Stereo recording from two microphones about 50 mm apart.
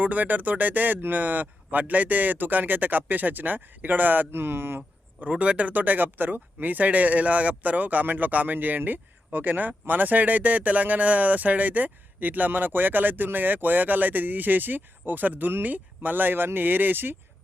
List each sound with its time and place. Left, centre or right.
0.0 s speech: right
5.3 s speech: right